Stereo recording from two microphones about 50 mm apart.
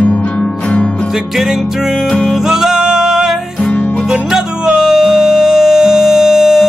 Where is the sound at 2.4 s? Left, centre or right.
Centre.